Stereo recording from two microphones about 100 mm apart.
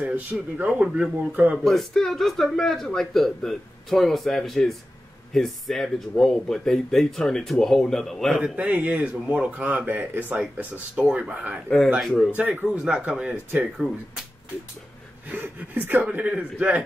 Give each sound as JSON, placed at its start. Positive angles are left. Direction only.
{"t": 0.0, "sound": "speech", "side_deg": -10}
{"t": 1.6, "sound": "a man's voice", "side_deg": 0}
{"t": 8.4, "sound": "speech", "side_deg": -15}
{"t": 13.7, "sound": "a man's voice", "side_deg": 0}
{"t": 15.2, "sound": "speech", "side_deg": -20}